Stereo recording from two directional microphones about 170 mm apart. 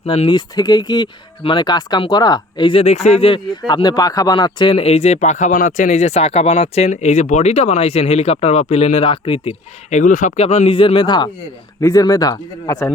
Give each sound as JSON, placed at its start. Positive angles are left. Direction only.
{"t": 0.0, "sound": "speech", "side_deg": 30}